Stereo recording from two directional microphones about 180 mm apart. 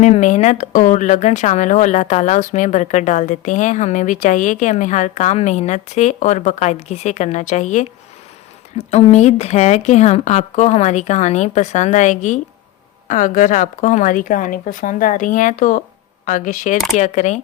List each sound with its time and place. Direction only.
0.0 s speech: 40° left (ahead or behind)
8.9 s a woman's voice: 40° left (ahead or behind)
16.7 s speech: centre (ahead or behind)
17.0 s speech: 40° left (ahead or behind)